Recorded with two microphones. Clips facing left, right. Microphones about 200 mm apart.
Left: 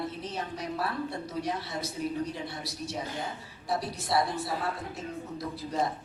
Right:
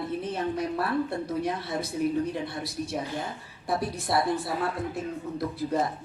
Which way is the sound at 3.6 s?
55° right (ahead or behind).